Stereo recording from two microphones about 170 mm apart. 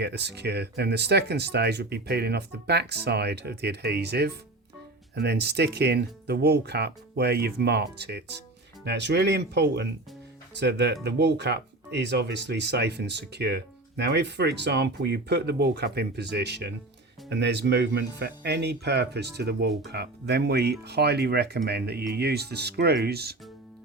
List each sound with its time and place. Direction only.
0.0 s speech: 80° right
8.8 s speech: 85° right; by 23.4 s 70° right (ahead or behind)